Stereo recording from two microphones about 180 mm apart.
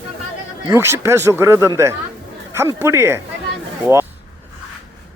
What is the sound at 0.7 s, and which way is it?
Speech, 15° right (ahead or behind).